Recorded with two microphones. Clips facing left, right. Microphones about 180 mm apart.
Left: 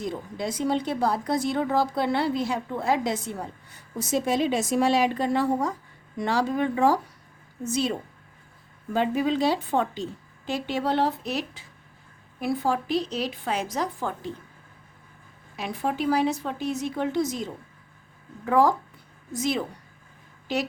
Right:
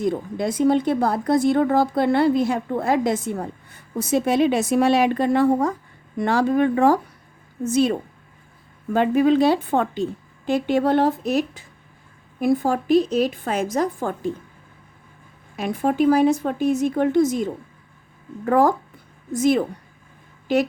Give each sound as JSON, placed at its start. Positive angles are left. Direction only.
{"t": 0.0, "sound": "a woman's voice", "side_deg": -55}
{"t": 15.5, "sound": "speech", "side_deg": -50}